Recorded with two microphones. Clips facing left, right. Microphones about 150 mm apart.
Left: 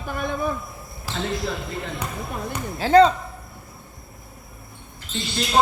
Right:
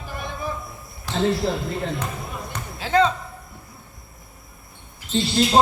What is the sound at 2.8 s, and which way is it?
Speech, 40° left (ahead or behind).